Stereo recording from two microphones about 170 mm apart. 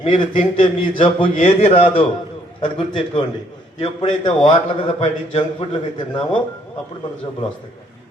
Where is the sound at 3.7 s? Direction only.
30° left (ahead or behind).